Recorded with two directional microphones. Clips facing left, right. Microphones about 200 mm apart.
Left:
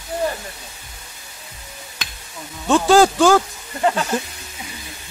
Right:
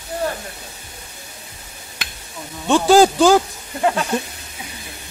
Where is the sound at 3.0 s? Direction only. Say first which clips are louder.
Right 1 dB; 15° right (ahead or behind).